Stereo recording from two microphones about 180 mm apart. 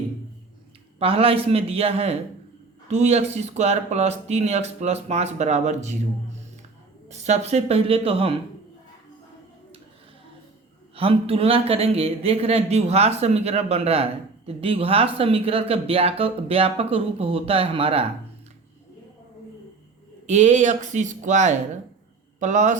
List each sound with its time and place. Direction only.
0.9 s speech: 30° right (ahead or behind)
7.1 s speech: 40° right (ahead or behind)
10.9 s speech: 30° right (ahead or behind)
20.2 s speech: 40° right (ahead or behind)